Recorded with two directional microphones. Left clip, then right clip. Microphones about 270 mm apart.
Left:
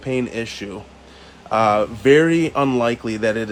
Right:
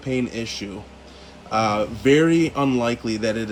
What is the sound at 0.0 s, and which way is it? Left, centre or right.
Speech, centre.